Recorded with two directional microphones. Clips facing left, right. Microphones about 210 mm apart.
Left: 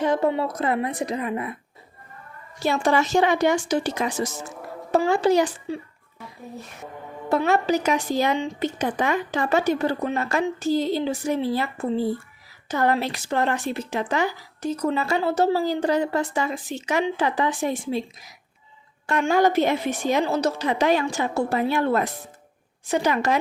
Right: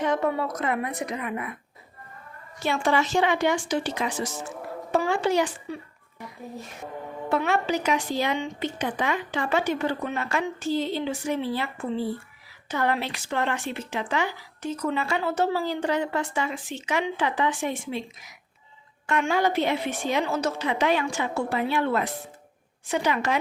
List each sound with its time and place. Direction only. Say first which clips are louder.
0.0 s a woman's voice: left 3 dB; 30° left (ahead or behind)
2.6 s a woman's voice: left 3 dB; 40° left (ahead or behind)
7.3 s a woman's voice: left 4 dB; 40° left (ahead or behind)